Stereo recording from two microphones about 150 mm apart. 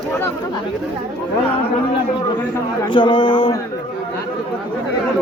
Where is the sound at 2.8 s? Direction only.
35° left (ahead or behind).